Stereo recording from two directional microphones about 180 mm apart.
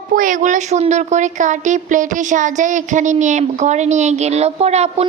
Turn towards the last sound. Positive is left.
turn(degrees=-35)  # may be behind; listen again after turning